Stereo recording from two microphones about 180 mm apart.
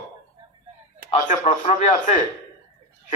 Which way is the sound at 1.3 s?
40° left (ahead or behind).